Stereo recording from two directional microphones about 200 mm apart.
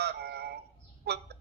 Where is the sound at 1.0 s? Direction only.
55° right (ahead or behind).